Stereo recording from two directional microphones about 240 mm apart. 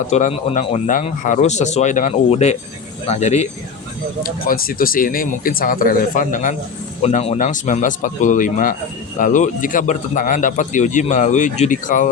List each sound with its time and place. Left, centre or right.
0.1 s a man's voice: left